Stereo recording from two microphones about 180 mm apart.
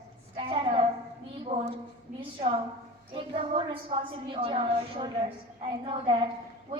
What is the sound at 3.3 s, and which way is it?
A woman's voice, 30° right (ahead or behind).